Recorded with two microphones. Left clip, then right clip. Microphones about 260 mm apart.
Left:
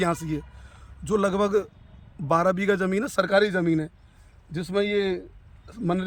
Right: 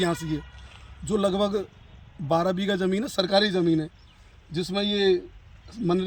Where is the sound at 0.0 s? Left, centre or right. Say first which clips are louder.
Left 1 dB; centre.